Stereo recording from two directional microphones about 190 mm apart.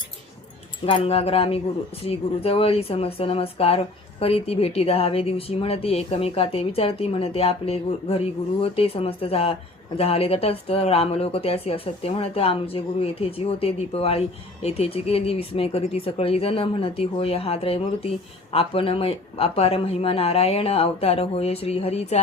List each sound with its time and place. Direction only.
0.9 s speech: 30° left (ahead or behind)